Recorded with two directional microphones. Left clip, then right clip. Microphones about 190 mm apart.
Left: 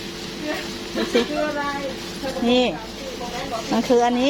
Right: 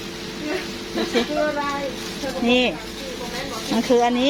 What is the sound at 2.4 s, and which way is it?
Speech, 10° left (ahead or behind).